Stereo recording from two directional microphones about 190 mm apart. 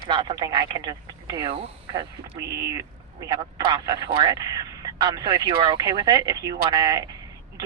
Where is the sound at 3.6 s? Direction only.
25° right (ahead or behind).